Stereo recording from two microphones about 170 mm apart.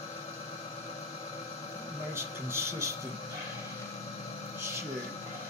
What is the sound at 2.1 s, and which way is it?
Speech, 15° right (ahead or behind).